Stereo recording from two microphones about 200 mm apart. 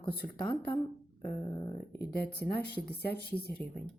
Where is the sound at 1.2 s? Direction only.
15° left (ahead or behind).